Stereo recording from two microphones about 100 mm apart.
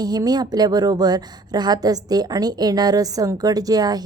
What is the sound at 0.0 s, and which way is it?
A woman's voice, 45° right (ahead or behind).